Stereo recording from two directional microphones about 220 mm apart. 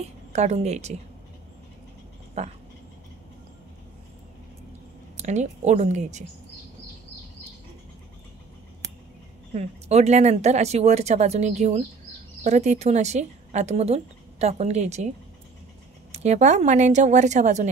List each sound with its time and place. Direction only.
0.0 s speech: 30° right (ahead or behind)
2.4 s speech: 30° right (ahead or behind)
5.1 s a woman's voice: 30° right (ahead or behind)
9.5 s a woman's voice: 30° right (ahead or behind)